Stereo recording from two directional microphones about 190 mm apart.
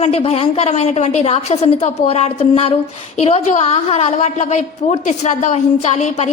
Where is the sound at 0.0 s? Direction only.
30° left (ahead or behind).